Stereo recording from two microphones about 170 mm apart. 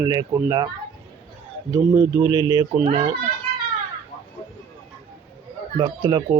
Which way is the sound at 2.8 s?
35° right (ahead or behind).